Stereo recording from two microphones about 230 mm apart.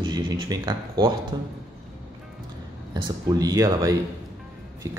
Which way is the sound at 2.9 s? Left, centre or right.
Centre.